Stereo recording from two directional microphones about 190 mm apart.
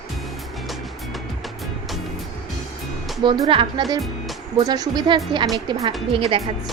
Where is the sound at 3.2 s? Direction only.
25° right (ahead or behind).